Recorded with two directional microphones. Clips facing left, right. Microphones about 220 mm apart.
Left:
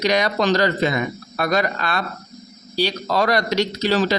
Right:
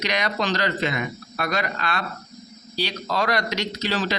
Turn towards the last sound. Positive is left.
turn(degrees=40)  # may be behind; listen again after turning